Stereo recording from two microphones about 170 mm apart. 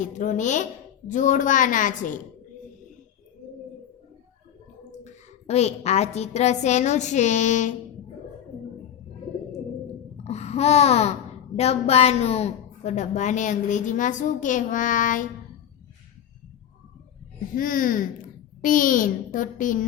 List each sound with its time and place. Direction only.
0.0 s a woman's voice: 45° left (ahead or behind)
5.0 s a woman's voice: 40° left (ahead or behind)
10.2 s babbling: 40° left (ahead or behind)
11.5 s a woman's voice: 40° left (ahead or behind)
17.5 s a woman's voice: 55° left (ahead or behind)